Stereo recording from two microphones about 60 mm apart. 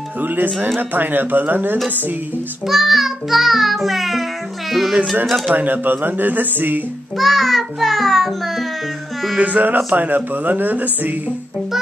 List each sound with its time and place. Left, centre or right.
0.2 s speech: right
2.6 s music: centre
5.5 s speech: right
7.2 s music: centre
9.4 s speech: right